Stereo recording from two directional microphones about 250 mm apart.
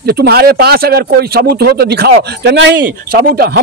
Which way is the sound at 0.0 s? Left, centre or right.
Right.